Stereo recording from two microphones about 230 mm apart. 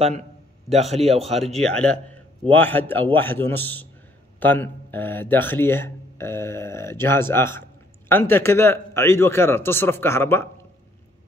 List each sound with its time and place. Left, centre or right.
0.9 s speech: right
1.6 s a man's voice: centre